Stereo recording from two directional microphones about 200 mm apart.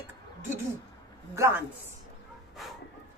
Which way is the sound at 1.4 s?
10° right (ahead or behind).